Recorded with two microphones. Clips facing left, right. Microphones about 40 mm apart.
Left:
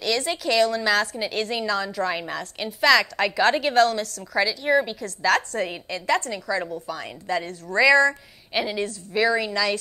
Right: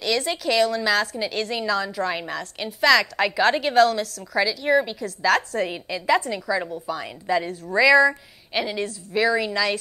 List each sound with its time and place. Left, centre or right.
0.0 s a woman's voice: centre